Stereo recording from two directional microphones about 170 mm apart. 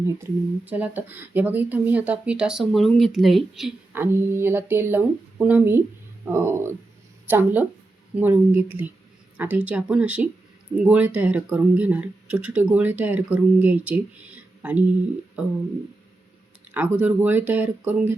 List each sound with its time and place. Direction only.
0.0 s speech: 10° right (ahead or behind)
3.9 s speech: 15° right (ahead or behind)
16.7 s speech: 10° right (ahead or behind)